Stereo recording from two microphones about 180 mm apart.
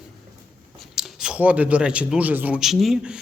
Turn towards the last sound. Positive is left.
turn(degrees=-5)  # may be behind; listen again after turning